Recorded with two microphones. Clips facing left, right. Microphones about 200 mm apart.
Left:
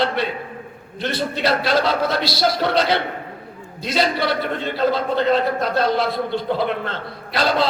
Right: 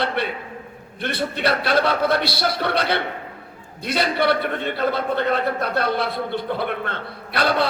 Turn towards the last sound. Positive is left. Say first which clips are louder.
# left 1 dB
turn(degrees=-60)  # may be behind; listen again after turning